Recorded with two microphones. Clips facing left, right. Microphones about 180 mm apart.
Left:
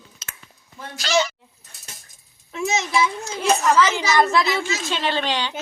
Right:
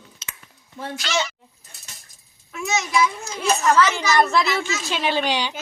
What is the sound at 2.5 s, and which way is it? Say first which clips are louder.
Speech: even; 25° left (ahead or behind).